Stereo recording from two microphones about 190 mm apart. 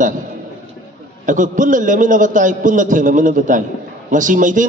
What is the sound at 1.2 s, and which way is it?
A man's voice, 40° right (ahead or behind).